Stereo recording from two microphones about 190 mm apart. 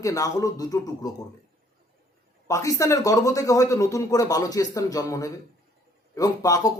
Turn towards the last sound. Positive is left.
turn(degrees=20)  # may be behind; listen again after turning